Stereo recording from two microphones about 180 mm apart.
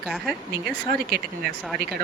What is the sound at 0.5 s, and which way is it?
Speech, 60° right (ahead or behind).